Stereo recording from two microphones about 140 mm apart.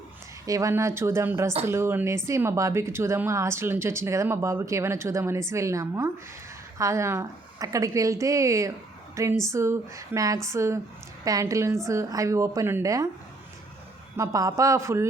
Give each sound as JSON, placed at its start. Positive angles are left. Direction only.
{"t": 0.4, "sound": "speech", "side_deg": -25}
{"t": 14.2, "sound": "speech", "side_deg": -25}